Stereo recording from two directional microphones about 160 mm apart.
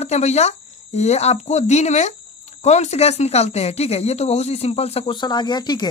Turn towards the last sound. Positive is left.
turn(degrees=25)  # may be behind; listen again after turning